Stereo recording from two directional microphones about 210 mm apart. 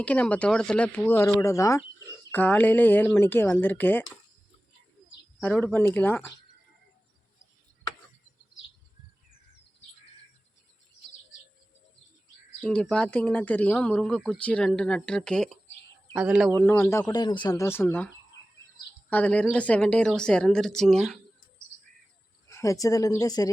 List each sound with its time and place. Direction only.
0.0 s speech: 5° left (ahead or behind)
5.4 s speech: 5° left (ahead or behind)
12.6 s speech: 5° left (ahead or behind)
16.6 s speech: 10° left (ahead or behind)
19.1 s speech: 5° left (ahead or behind)
22.4 s speech: 15° left (ahead or behind)